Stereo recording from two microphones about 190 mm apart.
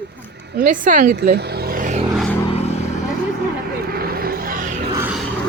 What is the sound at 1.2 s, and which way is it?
Vehicle, 60° right (ahead or behind).